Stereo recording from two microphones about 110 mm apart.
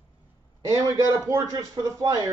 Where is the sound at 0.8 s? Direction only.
30° right (ahead or behind).